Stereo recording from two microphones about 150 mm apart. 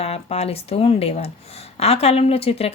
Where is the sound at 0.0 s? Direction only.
40° left (ahead or behind).